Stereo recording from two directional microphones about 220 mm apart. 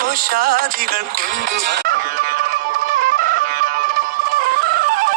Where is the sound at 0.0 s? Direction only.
40° right (ahead or behind).